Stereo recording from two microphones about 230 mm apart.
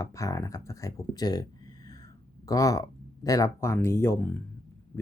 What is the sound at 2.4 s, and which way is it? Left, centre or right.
Speech, centre.